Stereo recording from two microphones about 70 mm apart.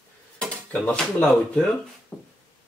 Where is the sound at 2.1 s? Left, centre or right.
Left.